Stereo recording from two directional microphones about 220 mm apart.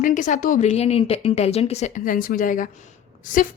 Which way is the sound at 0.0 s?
35° left (ahead or behind).